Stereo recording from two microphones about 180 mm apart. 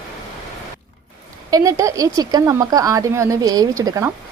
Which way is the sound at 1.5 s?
20° right (ahead or behind).